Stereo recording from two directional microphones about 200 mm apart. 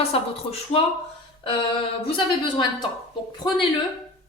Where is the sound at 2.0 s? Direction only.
25° left (ahead or behind).